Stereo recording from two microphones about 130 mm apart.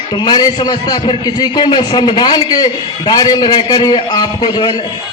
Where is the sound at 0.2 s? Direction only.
30° left (ahead or behind).